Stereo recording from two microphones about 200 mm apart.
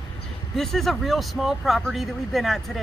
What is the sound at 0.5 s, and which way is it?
Speech, centre (ahead or behind).